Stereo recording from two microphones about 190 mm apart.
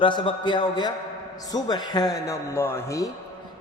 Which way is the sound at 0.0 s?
25° left (ahead or behind).